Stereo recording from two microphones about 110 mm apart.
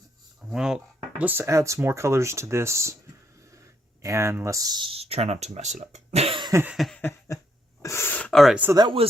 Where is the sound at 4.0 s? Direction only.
25° right (ahead or behind).